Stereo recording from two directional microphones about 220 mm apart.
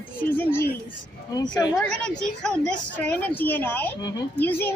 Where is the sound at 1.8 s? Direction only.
5° left (ahead or behind).